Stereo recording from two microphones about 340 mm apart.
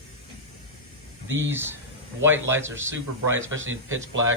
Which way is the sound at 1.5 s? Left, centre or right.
Centre.